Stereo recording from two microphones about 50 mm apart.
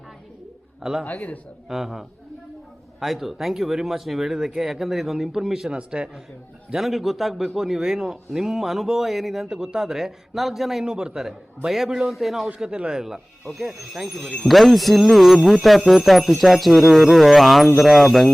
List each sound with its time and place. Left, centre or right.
0.8 s speech: centre
1.0 s a man's voice: left
1.7 s a man's voice: centre
5.7 s a man's voice: right
6.7 s a man's voice: centre
10.8 s a man's voice: centre
12.5 s a man's voice: centre